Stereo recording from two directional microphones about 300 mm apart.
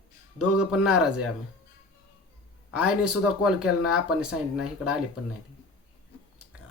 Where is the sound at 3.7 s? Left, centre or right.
Left.